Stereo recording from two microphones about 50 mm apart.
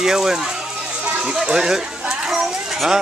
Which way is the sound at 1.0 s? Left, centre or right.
Centre.